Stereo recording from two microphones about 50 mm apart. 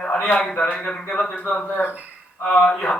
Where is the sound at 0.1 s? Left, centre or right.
Left.